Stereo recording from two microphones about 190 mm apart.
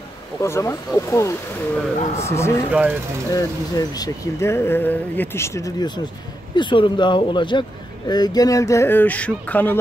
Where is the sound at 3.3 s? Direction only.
20° left (ahead or behind).